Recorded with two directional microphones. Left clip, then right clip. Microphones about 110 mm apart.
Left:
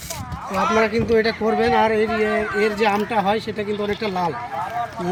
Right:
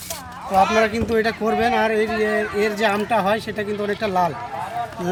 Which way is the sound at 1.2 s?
55° right (ahead or behind).